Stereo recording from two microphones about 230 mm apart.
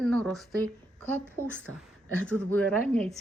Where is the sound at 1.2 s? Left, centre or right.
Centre.